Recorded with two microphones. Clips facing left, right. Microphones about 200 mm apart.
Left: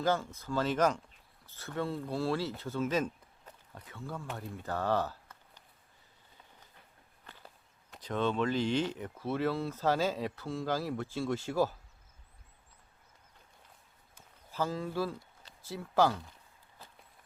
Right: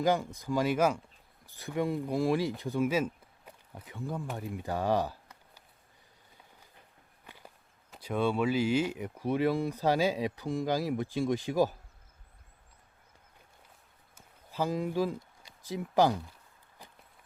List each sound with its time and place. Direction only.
0.0 s speech: 15° right (ahead or behind)
7.3 s walk: 15° right (ahead or behind)
7.9 s speech: 10° right (ahead or behind)
14.2 s a sound: 15° right (ahead or behind)